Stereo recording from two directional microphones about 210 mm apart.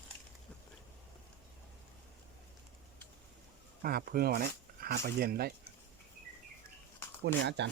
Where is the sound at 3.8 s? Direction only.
45° right (ahead or behind).